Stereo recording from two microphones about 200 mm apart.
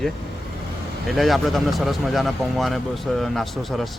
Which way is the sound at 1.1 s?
Centre (ahead or behind).